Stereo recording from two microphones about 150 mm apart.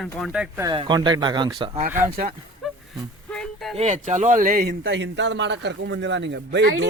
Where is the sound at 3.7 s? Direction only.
50° right (ahead or behind); by 4.9 s 80° right.